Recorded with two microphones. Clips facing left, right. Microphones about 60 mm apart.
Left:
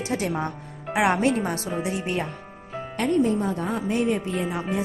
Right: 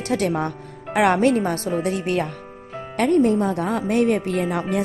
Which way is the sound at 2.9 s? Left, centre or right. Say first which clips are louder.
Right 5 dB; right.